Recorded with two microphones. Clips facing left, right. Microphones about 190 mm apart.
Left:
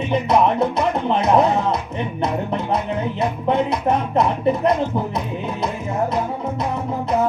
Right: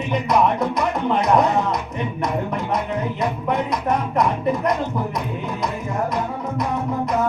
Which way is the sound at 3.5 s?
25° left (ahead or behind).